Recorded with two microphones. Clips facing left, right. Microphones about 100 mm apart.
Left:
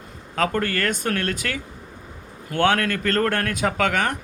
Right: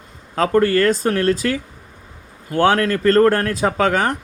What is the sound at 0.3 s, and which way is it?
Speech, 35° right (ahead or behind).